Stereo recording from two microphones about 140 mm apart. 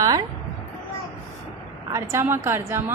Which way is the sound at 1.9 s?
20° right (ahead or behind).